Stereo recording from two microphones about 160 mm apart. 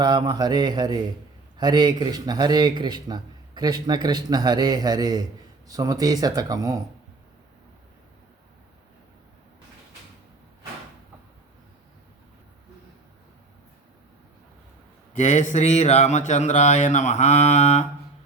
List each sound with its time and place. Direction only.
0.0 s a man's voice: 25° right (ahead or behind)
15.1 s speech: 50° left (ahead or behind)